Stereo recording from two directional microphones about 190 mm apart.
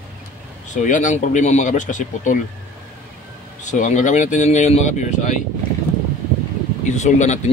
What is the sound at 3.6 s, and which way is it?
Speech, 40° left (ahead or behind).